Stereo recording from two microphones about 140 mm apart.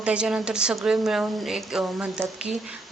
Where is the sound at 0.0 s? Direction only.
5° right (ahead or behind).